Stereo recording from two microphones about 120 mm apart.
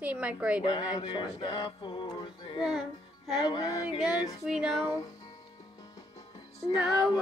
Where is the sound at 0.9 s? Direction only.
40° left (ahead or behind).